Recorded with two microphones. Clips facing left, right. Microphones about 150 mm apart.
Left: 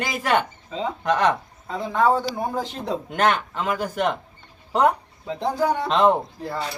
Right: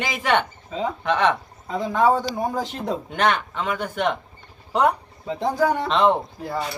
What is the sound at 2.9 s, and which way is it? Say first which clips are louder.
Speech: left 1 dB; 5° left (ahead or behind).